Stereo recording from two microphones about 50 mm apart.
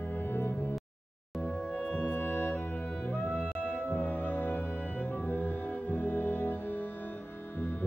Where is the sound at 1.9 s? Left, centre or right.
Left.